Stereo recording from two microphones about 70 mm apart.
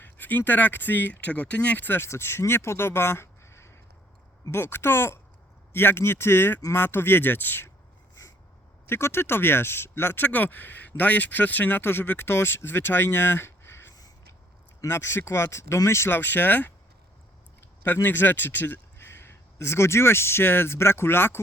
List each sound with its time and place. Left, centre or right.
0.0 s speech: left
2.0 s speech: left
8.9 s speech: left